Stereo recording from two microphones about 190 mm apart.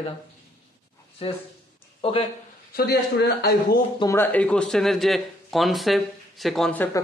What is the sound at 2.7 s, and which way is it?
Speech, 55° left (ahead or behind).